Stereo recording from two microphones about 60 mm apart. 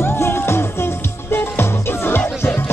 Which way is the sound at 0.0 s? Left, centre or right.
Left.